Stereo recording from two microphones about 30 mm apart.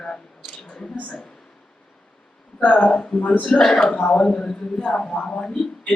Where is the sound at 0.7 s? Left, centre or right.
Left.